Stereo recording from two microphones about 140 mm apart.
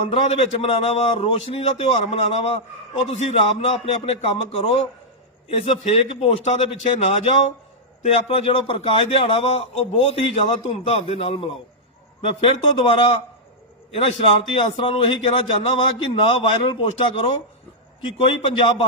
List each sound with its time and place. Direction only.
0.1 s a man's voice: 45° left (ahead or behind)
14.5 s a man's voice: 40° left (ahead or behind)